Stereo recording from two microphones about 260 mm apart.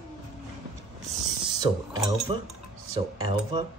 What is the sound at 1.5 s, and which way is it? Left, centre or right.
Speech, centre.